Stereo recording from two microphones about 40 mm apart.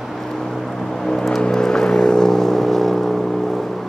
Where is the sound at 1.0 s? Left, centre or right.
Centre.